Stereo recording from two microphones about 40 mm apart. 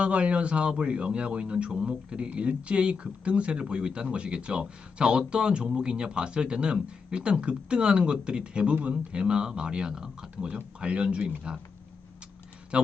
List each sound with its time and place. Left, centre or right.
0.0 s speech: right
12.7 s speech: right